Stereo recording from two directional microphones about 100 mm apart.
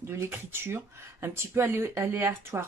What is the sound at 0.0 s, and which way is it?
Speech, 25° right (ahead or behind).